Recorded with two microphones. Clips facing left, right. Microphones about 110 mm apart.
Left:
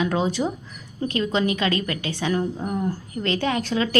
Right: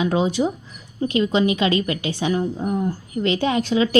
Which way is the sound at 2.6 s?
5° right (ahead or behind).